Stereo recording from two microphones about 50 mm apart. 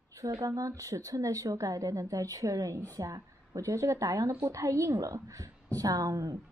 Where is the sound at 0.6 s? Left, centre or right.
Right.